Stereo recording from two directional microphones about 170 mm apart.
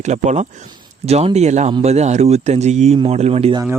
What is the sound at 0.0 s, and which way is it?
Speech, 45° right (ahead or behind).